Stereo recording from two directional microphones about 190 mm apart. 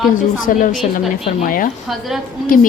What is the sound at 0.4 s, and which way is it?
A woman's voice, 45° left (ahead or behind).